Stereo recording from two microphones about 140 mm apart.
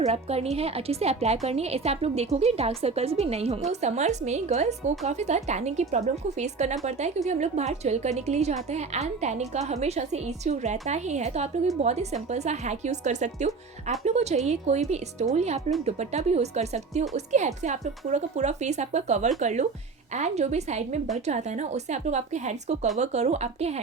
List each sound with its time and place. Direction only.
0.0 s a woman's voice: 45° right (ahead or behind)